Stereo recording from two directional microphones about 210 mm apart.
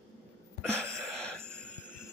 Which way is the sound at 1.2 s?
5° left (ahead or behind).